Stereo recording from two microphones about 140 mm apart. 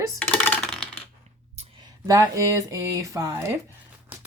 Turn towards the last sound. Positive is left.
turn(degrees=-20)  # may be behind; listen again after turning